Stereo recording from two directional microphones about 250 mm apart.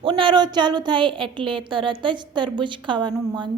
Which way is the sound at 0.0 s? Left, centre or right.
Right.